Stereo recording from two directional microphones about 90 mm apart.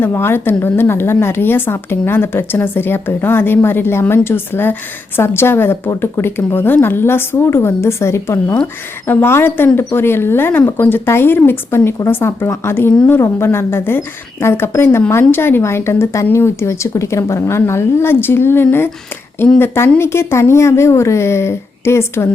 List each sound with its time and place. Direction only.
0.0 s speech: 25° left (ahead or behind)